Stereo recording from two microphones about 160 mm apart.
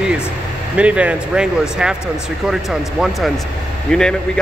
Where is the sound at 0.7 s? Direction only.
10° right (ahead or behind).